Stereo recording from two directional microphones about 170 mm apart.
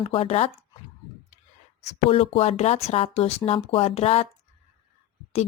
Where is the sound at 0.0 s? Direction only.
30° left (ahead or behind).